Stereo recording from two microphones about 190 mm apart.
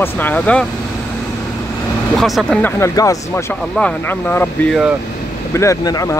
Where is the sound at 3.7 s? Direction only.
5° left (ahead or behind).